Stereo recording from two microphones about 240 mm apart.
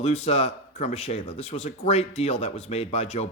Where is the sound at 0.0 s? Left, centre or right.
Left.